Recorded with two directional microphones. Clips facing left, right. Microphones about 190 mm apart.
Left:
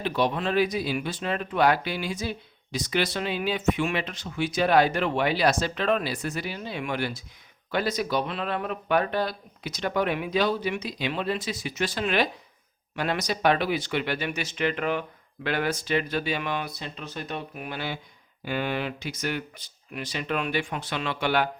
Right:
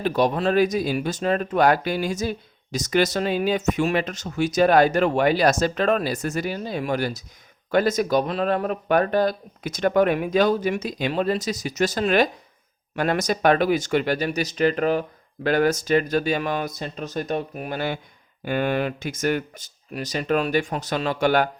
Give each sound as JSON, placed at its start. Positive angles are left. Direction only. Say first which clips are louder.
{"t": 0.0, "sound": "speech", "louder": "right 5 dB", "side_deg": -45}